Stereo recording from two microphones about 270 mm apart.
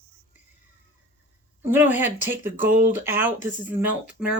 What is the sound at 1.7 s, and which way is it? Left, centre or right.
Speech, centre.